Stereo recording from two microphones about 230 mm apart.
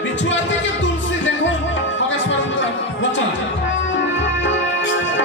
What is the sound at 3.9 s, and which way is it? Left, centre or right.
Music, left.